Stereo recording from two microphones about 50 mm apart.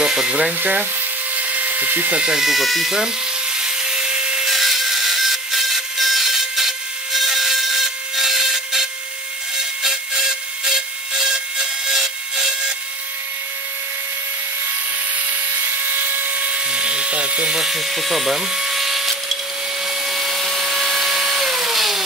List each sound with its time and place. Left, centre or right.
0.0 s speech: centre
0.6 s speech: right
1.3 s dental drill: right
2.2 s speech: centre
3.5 s wood: centre
4.5 s a sound: centre
9.8 s wood: centre
15.1 s dental drill: right
17.6 s speech: centre
20.1 s vacuum cleaner: centre